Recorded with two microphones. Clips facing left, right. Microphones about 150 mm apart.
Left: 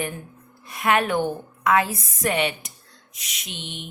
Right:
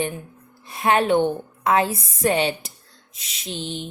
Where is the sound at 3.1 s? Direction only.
30° right (ahead or behind).